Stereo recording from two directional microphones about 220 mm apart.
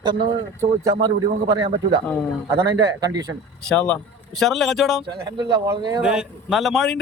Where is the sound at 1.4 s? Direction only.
20° right (ahead or behind).